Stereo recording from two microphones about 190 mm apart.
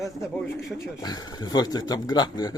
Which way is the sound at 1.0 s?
20° left (ahead or behind).